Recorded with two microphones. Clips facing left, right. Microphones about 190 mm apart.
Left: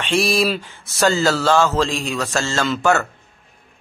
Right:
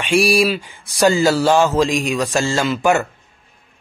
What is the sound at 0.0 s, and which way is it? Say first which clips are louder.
Speech: right 3 dB; 10° right (ahead or behind).